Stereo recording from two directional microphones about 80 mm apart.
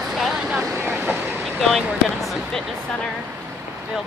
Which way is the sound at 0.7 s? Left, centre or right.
Right.